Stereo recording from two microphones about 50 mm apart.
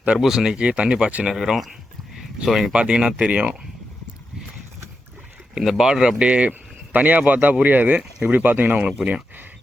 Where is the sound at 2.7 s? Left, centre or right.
Right.